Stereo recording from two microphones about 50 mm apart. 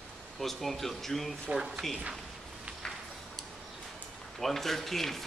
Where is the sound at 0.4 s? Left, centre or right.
Centre.